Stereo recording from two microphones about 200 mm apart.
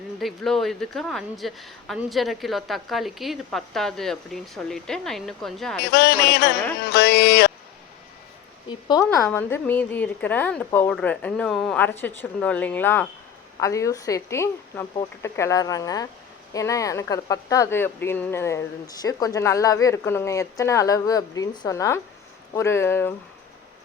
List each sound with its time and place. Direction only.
0.2 s speech: centre (ahead or behind)
5.9 s music: 55° left (ahead or behind)
8.7 s a woman's voice: 20° left (ahead or behind)
9.0 s a woman's voice: 10° left (ahead or behind)